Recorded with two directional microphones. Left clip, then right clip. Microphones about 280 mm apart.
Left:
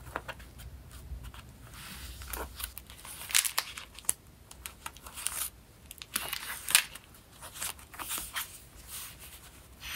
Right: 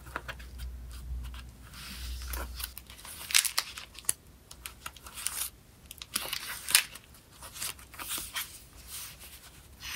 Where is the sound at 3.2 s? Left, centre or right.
Centre.